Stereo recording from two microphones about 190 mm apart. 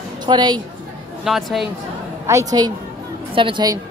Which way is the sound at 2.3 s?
15° right (ahead or behind).